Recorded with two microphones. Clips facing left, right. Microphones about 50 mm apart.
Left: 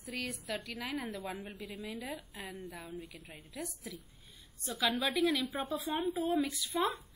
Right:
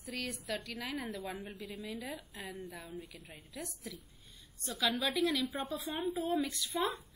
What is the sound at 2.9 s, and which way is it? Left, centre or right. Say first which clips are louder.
Speech: left 1 dB; left.